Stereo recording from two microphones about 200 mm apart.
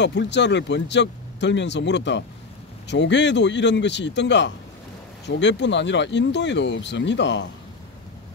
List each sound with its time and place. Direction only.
0.0 s speech: 60° left (ahead or behind)